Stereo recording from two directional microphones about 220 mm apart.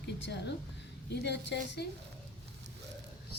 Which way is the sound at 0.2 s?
50° left (ahead or behind).